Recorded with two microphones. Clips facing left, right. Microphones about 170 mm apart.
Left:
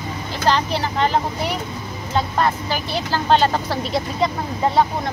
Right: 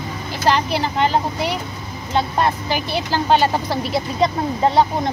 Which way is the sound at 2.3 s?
15° right (ahead or behind).